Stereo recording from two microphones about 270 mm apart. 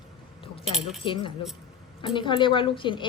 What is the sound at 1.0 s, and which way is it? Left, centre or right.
A woman's voice, centre.